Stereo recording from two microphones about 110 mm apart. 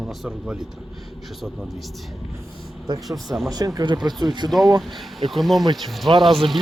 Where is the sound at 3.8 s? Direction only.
40° right (ahead or behind).